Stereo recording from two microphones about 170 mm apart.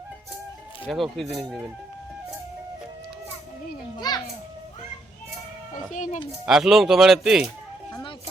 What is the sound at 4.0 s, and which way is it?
Children playing, 25° left (ahead or behind).